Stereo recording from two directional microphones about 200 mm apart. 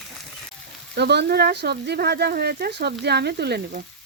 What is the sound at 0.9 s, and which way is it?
Speech, 55° right (ahead or behind).